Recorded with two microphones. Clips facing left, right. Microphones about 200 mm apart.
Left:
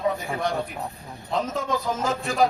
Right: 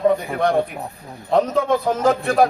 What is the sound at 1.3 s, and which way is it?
A man's voice, 60° right (ahead or behind).